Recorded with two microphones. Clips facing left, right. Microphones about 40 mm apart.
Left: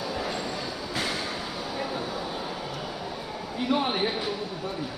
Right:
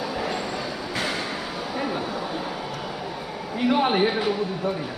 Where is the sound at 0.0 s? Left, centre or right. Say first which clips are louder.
Right 3 dB; right.